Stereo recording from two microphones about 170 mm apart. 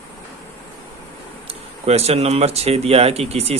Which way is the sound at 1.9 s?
35° right (ahead or behind).